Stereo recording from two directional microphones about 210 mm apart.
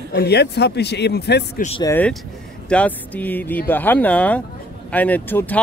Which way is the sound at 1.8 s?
10° left (ahead or behind).